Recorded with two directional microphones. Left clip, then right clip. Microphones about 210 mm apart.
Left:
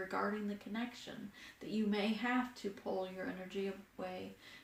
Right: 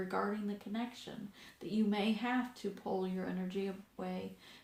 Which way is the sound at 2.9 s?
40° right (ahead or behind).